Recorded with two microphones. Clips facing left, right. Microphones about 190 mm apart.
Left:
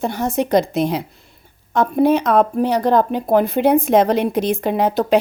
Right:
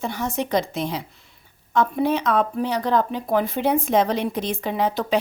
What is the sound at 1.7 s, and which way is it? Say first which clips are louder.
Speech: left 5 dB; 45° left (ahead or behind).